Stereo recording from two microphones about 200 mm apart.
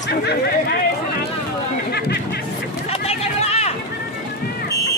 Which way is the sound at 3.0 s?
30° left (ahead or behind).